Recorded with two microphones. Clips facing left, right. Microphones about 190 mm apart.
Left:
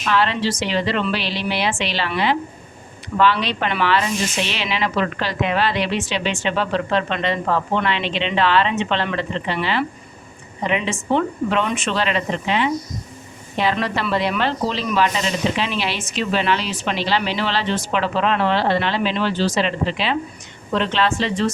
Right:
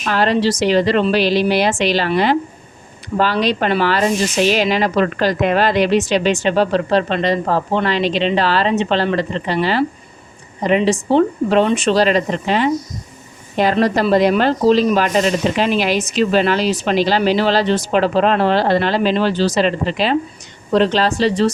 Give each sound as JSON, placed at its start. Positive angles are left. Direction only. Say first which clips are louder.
{"t": 0.1, "sound": "speech", "louder": "right 4 dB", "side_deg": -40}